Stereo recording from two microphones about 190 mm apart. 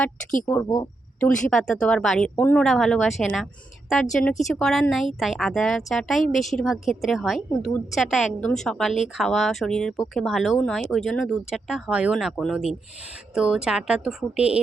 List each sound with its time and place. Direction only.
0.4 s speech: 15° left (ahead or behind)
1.2 s speech: 5° left (ahead or behind)